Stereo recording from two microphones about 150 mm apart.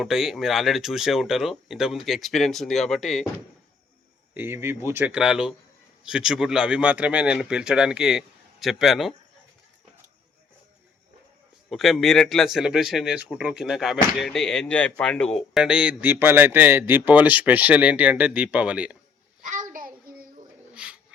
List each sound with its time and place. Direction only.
0.0 s speech: 5° right (ahead or behind)
4.4 s speech: 15° right (ahead or behind)
11.7 s speech: centre (ahead or behind)
19.5 s child singing: 65° right (ahead or behind)
20.7 s dog: 5° right (ahead or behind)